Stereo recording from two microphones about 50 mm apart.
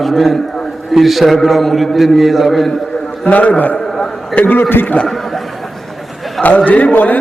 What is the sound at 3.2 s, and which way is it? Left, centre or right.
A man's voice, left.